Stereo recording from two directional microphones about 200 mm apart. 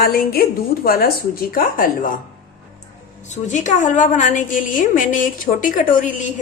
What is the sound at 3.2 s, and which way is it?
A woman's voice, 35° left (ahead or behind).